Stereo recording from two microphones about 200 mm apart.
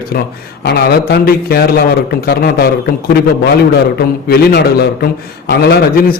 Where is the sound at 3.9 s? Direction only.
50° left (ahead or behind).